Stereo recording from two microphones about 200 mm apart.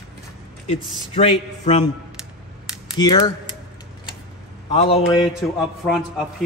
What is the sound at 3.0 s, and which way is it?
Speech, 20° left (ahead or behind).